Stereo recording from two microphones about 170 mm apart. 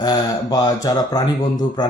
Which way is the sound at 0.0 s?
20° left (ahead or behind).